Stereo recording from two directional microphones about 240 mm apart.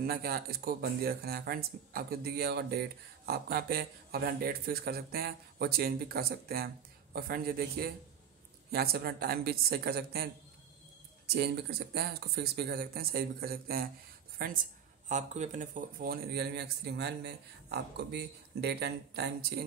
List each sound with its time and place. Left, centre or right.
0.0 s speech: right
11.3 s speech: right